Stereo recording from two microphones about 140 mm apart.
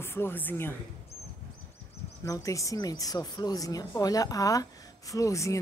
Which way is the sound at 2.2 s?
25° left (ahead or behind).